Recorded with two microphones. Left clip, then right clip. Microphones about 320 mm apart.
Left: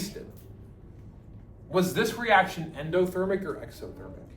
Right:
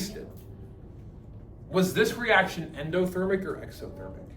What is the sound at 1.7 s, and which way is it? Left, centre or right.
A man's voice, centre.